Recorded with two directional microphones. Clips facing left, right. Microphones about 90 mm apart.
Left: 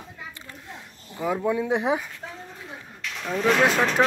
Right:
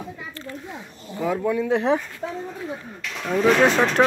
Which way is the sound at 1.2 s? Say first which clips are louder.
Right 2 dB; 15° left (ahead or behind).